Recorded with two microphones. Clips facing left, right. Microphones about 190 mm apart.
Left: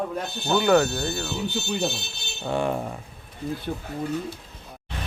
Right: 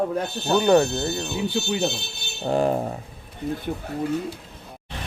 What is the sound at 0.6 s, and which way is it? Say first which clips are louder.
Speech: right 2 dB; 25° right (ahead or behind).